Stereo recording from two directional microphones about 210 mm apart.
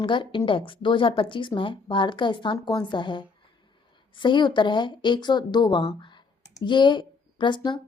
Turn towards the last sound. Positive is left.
turn(degrees=20)  # may be behind; listen again after turning